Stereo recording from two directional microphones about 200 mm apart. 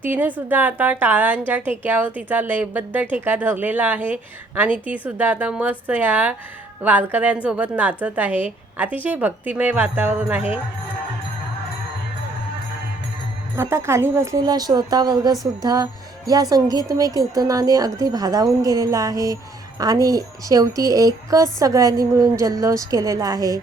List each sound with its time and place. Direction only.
0.0 s a woman's voice: 10° right (ahead or behind)
13.6 s a woman's voice: 15° right (ahead or behind)